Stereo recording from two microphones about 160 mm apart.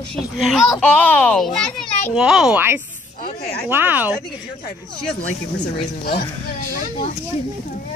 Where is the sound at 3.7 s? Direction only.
10° right (ahead or behind).